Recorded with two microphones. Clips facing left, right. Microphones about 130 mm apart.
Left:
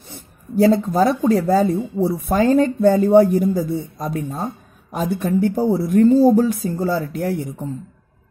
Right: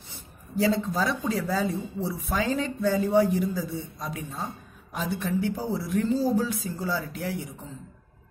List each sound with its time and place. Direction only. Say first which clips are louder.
0.1 s speech: left 8 dB; 50° left (ahead or behind)